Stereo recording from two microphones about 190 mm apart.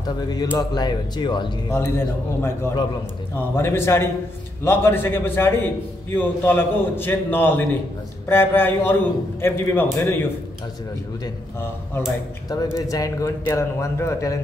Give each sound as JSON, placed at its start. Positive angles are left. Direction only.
{"t": 0.5, "sound": "speech", "side_deg": 20}
{"t": 1.8, "sound": "a man's voice", "side_deg": 10}
{"t": 12.7, "sound": "a man's voice", "side_deg": 20}